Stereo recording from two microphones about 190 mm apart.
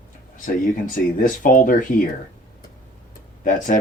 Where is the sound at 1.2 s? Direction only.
45° left (ahead or behind).